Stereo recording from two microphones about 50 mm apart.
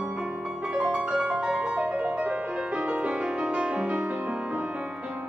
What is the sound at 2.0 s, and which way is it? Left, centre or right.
Music, right.